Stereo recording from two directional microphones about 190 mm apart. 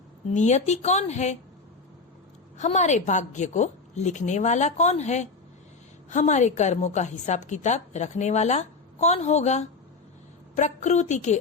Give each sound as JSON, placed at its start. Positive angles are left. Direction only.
{"t": 0.3, "sound": "a woman's voice", "side_deg": 35}
{"t": 2.6, "sound": "a woman's voice", "side_deg": 40}